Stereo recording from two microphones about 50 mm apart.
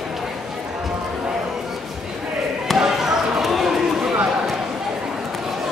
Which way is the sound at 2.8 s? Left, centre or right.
Centre.